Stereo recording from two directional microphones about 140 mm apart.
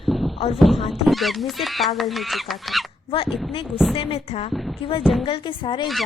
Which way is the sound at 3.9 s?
40° left (ahead or behind).